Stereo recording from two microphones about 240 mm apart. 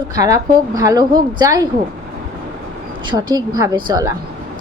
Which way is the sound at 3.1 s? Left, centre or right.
Centre.